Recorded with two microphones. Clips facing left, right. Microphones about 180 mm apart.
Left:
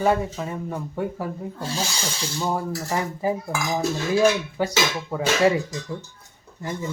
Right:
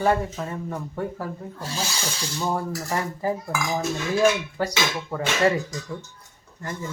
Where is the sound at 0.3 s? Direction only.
5° left (ahead or behind).